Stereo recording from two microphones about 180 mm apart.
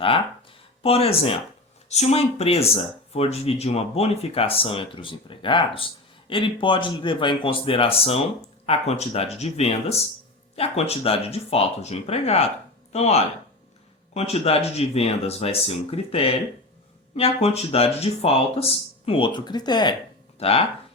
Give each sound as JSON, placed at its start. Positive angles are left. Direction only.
{"t": 0.8, "sound": "speech", "side_deg": 35}